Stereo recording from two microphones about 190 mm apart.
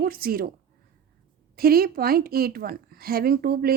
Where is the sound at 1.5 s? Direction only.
50° right (ahead or behind).